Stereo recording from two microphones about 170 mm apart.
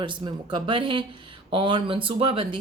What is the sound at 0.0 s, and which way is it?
Speech, 30° right (ahead or behind).